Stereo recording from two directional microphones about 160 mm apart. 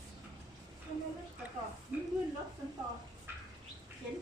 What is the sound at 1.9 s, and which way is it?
Sizzle, 10° right (ahead or behind).